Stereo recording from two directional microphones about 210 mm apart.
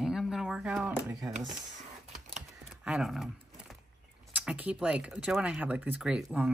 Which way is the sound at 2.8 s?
5° right (ahead or behind).